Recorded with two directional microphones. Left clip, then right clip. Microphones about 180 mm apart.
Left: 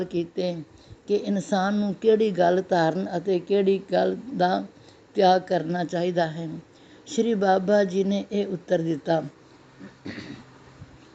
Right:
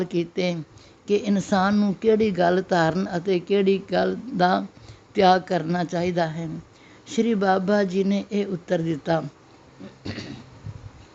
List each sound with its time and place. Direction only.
0.0 s speech: 30° right (ahead or behind)
2.0 s speech: 20° right (ahead or behind)